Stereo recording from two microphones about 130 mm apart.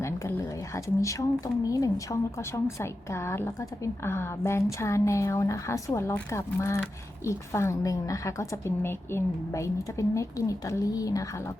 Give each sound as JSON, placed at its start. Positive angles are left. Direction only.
{"t": 0.0, "sound": "a woman's voice", "side_deg": 25}